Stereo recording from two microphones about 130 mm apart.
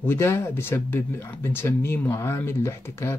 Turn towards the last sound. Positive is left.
turn(degrees=20)  # may be behind; listen again after turning